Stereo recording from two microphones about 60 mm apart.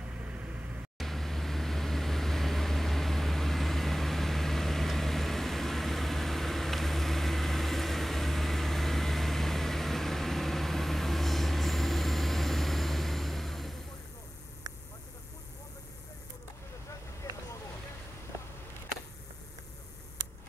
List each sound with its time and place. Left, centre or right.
0.2 s vehicle: centre
0.9 s vehicle: centre